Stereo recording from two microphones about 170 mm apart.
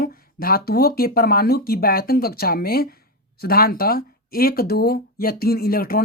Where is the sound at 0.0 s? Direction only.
60° left (ahead or behind).